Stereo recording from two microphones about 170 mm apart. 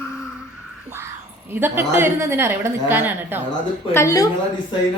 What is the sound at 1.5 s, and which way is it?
A woman's voice, 15° right (ahead or behind).